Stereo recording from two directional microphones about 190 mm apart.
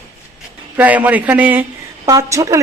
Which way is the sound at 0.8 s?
10° right (ahead or behind).